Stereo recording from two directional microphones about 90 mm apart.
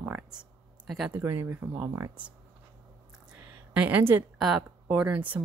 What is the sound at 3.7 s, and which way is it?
Speech, 15° right (ahead or behind).